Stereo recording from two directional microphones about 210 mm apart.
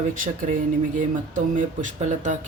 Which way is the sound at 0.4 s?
40° right (ahead or behind).